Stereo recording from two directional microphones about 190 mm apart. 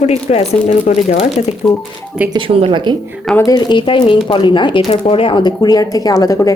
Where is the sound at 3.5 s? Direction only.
20° left (ahead or behind).